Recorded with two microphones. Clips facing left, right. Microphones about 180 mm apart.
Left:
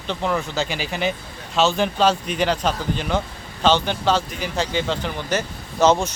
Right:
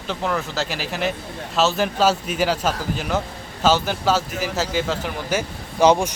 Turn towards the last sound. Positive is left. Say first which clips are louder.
# right 1 dB
turn(degrees=-10)  # may be behind; listen again after turning